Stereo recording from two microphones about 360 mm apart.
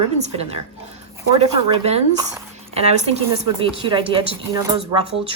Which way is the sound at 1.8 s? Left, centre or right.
Centre.